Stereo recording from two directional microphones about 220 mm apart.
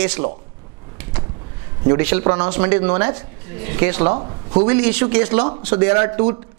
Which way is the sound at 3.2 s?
15° right (ahead or behind).